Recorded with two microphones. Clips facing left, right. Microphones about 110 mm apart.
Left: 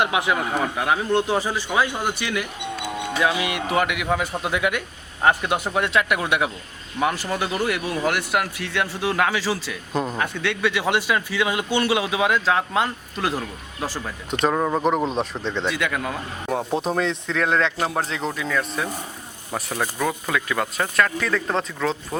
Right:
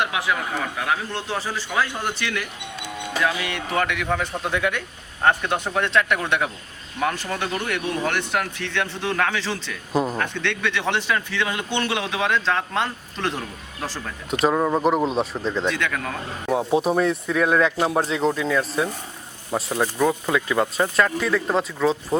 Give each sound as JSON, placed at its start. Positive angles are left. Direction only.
{"t": 0.0, "sound": "speech", "side_deg": 20}
{"t": 9.9, "sound": "speech", "side_deg": -5}
{"t": 10.2, "sound": "speech", "side_deg": 10}
{"t": 14.4, "sound": "speech", "side_deg": 0}
{"t": 16.5, "sound": "speech", "side_deg": -5}
{"t": 17.7, "sound": "speech", "side_deg": -5}
{"t": 19.7, "sound": "speech", "side_deg": -10}
{"t": 21.2, "sound": "speech", "side_deg": -10}